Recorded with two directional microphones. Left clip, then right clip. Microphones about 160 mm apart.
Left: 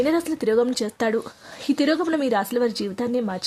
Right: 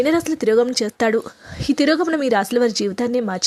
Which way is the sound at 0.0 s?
15° right (ahead or behind).